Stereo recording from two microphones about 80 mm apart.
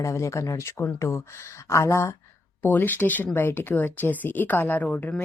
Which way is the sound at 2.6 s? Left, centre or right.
Left.